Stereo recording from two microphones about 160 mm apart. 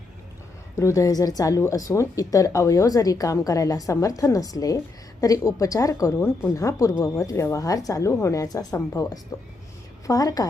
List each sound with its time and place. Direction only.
0.8 s speech: 20° left (ahead or behind)